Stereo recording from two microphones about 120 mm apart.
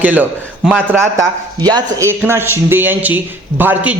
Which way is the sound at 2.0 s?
20° right (ahead or behind).